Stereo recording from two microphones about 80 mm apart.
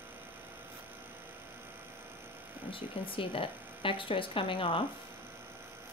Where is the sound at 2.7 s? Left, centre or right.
Left.